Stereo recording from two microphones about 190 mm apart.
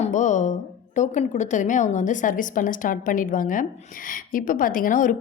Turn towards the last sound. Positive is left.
turn(degrees=45)  # may be behind; listen again after turning